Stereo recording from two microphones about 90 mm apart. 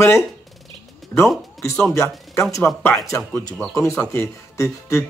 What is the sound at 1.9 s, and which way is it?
Speech, 35° left (ahead or behind).